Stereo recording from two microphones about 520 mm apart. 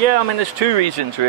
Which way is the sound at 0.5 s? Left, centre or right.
Right.